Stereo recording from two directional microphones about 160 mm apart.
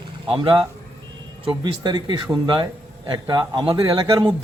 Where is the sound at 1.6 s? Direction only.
30° right (ahead or behind).